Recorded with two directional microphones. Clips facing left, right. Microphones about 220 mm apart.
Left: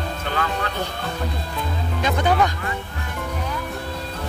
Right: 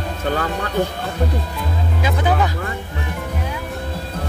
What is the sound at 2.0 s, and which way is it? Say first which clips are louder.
Music: even; 5° right (ahead or behind).